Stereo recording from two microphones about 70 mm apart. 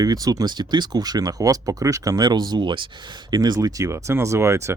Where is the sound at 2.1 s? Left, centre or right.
Right.